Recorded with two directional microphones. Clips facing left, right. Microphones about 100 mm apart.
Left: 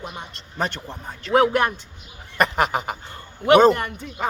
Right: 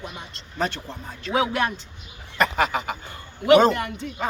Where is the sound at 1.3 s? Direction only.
55° left (ahead or behind).